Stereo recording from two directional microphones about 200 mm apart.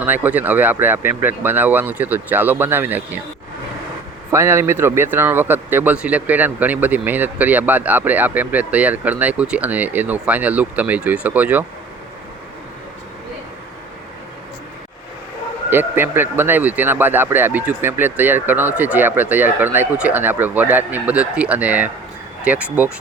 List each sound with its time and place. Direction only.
0.0 s speech: 10° right (ahead or behind)
4.3 s speech: 15° right (ahead or behind)
15.7 s speech: 10° right (ahead or behind)